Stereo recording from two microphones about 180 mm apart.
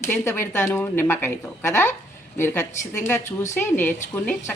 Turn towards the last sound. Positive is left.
turn(degrees=10)  # may be behind; listen again after turning